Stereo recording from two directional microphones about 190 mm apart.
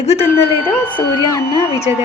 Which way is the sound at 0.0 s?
35° left (ahead or behind).